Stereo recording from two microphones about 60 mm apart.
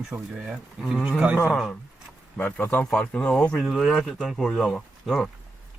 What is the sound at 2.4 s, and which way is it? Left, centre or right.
A man's voice, left.